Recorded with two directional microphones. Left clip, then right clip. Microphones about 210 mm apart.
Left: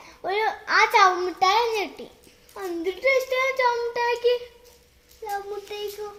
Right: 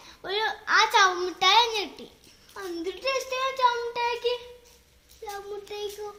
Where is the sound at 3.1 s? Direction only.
25° right (ahead or behind).